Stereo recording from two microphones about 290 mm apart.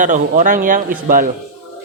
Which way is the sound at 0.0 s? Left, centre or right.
Right.